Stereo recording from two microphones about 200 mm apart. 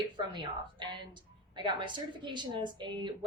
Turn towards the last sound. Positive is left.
turn(degrees=-25)  # may be behind; listen again after turning